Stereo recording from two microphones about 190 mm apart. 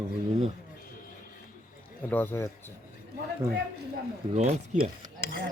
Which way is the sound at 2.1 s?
10° left (ahead or behind).